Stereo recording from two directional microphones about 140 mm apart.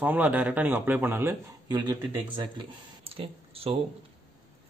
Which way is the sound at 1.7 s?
30° right (ahead or behind).